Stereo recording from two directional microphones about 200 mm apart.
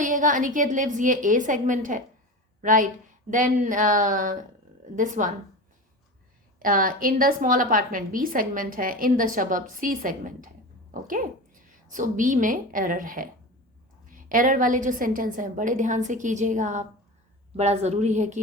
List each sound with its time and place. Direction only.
0.0 s a woman's voice: 40° right (ahead or behind)
6.6 s a woman's voice: 45° right (ahead or behind)